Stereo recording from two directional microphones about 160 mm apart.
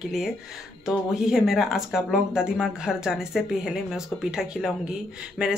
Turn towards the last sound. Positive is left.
turn(degrees=-5)  # may be behind; listen again after turning